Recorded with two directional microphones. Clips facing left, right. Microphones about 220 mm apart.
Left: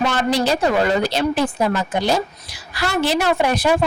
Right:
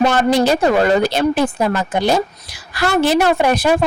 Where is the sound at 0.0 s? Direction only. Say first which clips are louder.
Right 5 dB; 50° right (ahead or behind).